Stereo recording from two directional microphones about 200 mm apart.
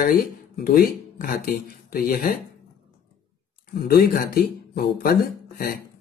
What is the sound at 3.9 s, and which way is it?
Speech, 50° left (ahead or behind).